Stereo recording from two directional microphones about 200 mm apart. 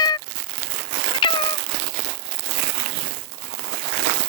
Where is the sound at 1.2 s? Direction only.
25° left (ahead or behind).